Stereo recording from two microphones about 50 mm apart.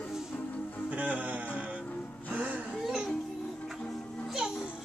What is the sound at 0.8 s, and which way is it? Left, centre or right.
Music, right.